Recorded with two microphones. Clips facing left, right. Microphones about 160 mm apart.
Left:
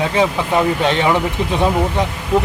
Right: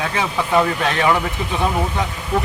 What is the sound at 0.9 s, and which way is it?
Speech, 25° left (ahead or behind).